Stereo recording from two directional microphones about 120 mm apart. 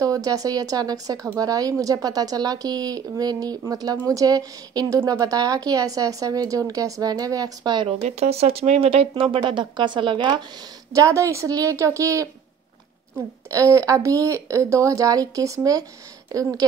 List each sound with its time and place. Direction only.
0.0 s a woman's voice: 30° right (ahead or behind)
8.0 s speech: 60° right (ahead or behind); by 10.4 s 40° right (ahead or behind)
10.9 s speech: 25° right (ahead or behind)
13.5 s speech: 25° right (ahead or behind)